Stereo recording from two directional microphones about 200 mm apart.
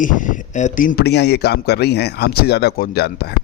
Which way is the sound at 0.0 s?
40° left (ahead or behind).